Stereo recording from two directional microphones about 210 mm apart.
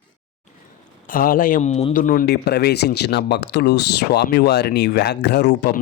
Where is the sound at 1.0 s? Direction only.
40° left (ahead or behind).